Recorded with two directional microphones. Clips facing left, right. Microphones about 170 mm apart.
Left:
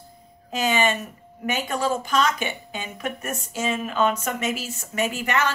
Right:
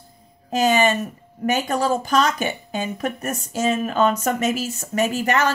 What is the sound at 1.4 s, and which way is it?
Speech, 40° right (ahead or behind).